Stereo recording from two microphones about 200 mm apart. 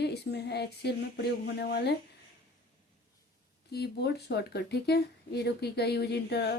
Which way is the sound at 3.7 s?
55° left (ahead or behind).